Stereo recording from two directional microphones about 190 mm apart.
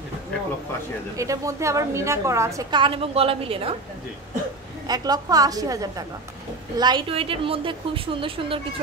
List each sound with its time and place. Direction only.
1.1 s a woman's voice: 15° right (ahead or behind)
4.8 s a woman's voice: 20° right (ahead or behind)